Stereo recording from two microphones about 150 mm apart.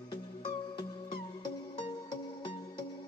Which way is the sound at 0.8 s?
30° left (ahead or behind).